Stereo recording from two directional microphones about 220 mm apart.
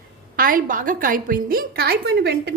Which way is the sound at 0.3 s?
40° right (ahead or behind).